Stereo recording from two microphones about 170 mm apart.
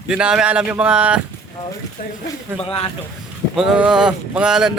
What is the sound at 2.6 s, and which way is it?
Speech, 35° left (ahead or behind).